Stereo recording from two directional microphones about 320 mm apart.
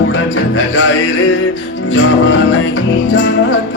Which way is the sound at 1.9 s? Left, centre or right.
Left.